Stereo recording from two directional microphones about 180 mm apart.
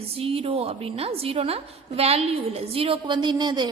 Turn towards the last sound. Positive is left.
turn(degrees=-25)  # may be behind; listen again after turning